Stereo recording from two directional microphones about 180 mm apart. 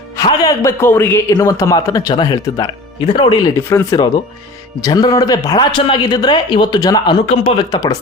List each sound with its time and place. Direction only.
0.2 s a man's voice: 20° left (ahead or behind)
3.6 s a man's voice: 15° left (ahead or behind)
7.3 s speech: 35° left (ahead or behind)
7.7 s speech: 20° left (ahead or behind)